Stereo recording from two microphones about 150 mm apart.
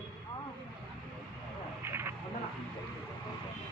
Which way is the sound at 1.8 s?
15° right (ahead or behind).